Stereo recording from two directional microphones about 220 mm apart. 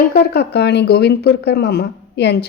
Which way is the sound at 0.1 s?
45° left (ahead or behind).